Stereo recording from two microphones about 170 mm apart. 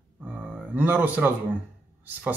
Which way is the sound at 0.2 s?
10° right (ahead or behind).